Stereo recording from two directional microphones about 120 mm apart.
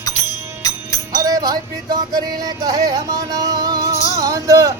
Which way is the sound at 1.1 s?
30° right (ahead or behind).